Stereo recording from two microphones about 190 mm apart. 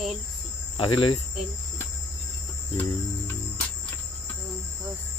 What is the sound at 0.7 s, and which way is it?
Speech, 25° left (ahead or behind).